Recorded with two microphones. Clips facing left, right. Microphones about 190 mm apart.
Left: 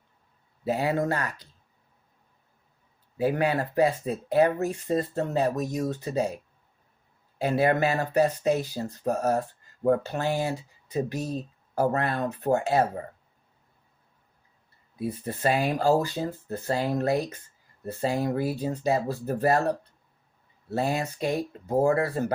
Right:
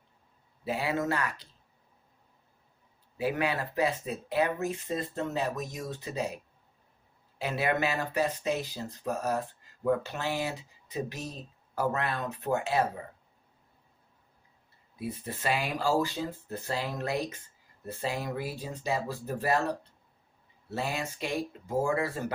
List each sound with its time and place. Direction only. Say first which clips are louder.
0.6 s speech: left 5 dB; 40° left (ahead or behind)
3.2 s speech: left 5 dB; 45° left (ahead or behind)
7.3 s speech: left 6 dB; 45° left (ahead or behind)
11.7 s speech: left 5 dB; 40° left (ahead or behind)
14.9 s speech: left 5 dB; 35° left (ahead or behind)
20.7 s speech: left 6 dB; 40° left (ahead or behind)